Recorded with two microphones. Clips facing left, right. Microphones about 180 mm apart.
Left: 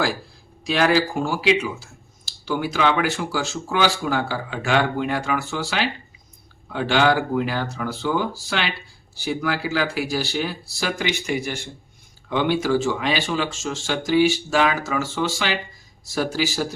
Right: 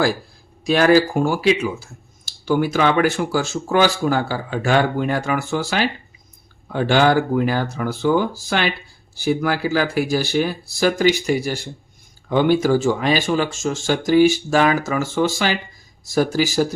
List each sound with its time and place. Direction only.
0.6 s speech: 45° right (ahead or behind)